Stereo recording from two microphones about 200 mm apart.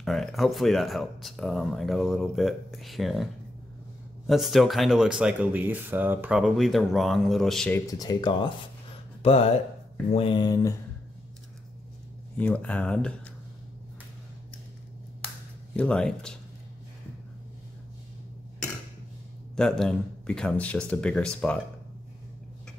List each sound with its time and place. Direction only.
0.0 s speech: centre (ahead or behind)
4.3 s speech: centre (ahead or behind)
7.8 s speech: 20° left (ahead or behind)
12.4 s speech: 5° left (ahead or behind)
15.7 s speech: 5° left (ahead or behind)
19.5 s speech: 5° left (ahead or behind)